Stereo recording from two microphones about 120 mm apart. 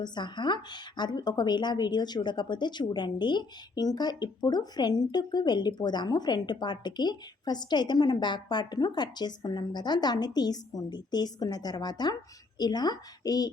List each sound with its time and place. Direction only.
0.0 s speech: 35° left (ahead or behind)